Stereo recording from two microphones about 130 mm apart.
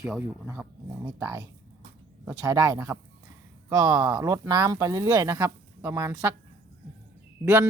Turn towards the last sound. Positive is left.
turn(degrees=-10)  # may be behind; listen again after turning